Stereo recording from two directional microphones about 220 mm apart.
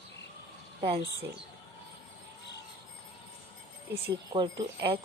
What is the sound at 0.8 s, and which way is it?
Speech, 25° right (ahead or behind).